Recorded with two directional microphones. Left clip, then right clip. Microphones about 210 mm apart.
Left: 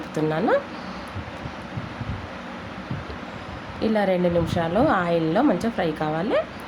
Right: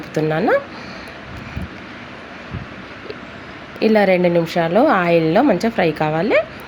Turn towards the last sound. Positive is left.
turn(degrees=-20)  # may be behind; listen again after turning